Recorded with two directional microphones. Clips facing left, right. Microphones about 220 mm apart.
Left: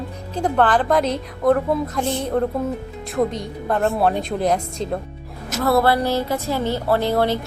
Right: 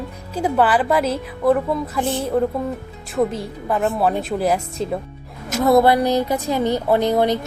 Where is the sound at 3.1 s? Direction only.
5° right (ahead or behind).